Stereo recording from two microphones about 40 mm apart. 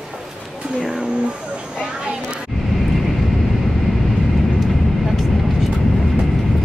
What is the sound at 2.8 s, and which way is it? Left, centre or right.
Vehicle, centre.